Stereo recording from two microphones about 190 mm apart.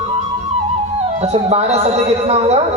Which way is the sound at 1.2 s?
35° right (ahead or behind).